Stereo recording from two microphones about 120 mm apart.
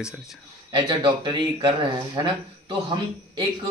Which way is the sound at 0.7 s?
45° right (ahead or behind).